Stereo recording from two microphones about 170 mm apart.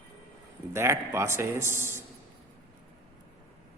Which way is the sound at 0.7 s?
15° right (ahead or behind).